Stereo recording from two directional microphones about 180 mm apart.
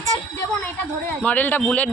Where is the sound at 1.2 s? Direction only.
10° left (ahead or behind).